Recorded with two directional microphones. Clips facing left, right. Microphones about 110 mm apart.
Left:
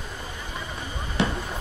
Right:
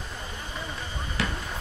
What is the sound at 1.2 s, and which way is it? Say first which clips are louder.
Fireworks: left 6 dB; 25° left (ahead or behind).